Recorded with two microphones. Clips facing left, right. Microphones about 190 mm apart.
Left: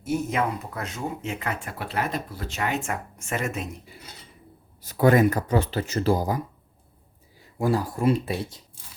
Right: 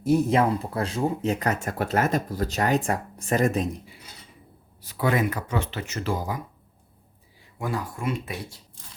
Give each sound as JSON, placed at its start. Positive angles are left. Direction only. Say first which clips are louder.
{"t": 0.0, "sound": "speech", "louder": "right 5 dB", "side_deg": -35}
{"t": 4.8, "sound": "speech", "louder": "left 6 dB", "side_deg": 45}
{"t": 7.6, "sound": "speech", "louder": "left 6 dB", "side_deg": 35}